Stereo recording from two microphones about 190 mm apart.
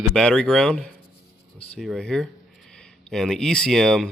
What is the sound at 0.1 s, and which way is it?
Speech, 5° left (ahead or behind).